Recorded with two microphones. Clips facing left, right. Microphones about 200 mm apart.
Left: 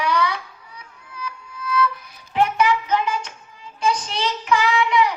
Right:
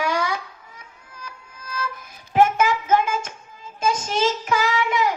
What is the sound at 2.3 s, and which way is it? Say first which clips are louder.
Child singing: right 1 dB; 45° right (ahead or behind).